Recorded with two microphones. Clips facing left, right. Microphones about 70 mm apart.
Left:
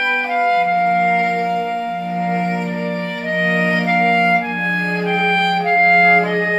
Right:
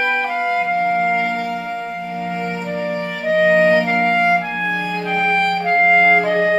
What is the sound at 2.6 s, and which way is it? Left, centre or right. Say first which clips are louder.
Music: even; centre.